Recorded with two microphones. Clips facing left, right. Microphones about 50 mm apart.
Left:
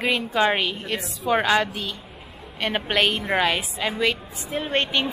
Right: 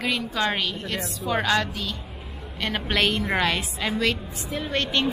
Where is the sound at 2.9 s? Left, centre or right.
Centre.